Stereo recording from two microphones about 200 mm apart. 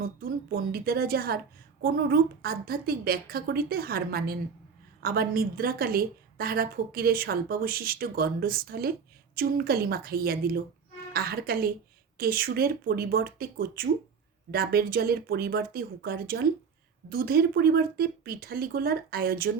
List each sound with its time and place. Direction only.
0.0 s a woman's voice: 45° right (ahead or behind)